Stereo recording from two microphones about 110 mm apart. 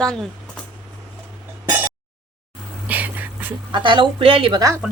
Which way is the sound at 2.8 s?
15° right (ahead or behind).